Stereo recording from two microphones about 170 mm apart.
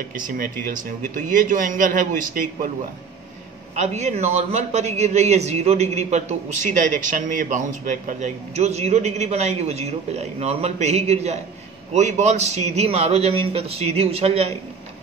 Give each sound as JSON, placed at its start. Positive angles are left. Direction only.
{"t": 0.1, "sound": "a man's voice", "side_deg": -55}
{"t": 3.8, "sound": "a man's voice", "side_deg": -40}